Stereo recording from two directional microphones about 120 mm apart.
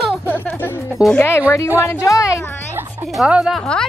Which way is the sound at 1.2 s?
20° left (ahead or behind).